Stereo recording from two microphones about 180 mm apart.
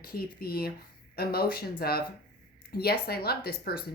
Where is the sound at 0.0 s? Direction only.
55° left (ahead or behind).